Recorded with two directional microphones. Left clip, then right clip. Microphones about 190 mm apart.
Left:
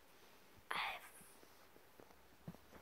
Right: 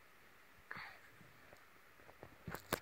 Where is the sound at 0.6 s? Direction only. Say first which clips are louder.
Left 8 dB; 55° left (ahead or behind).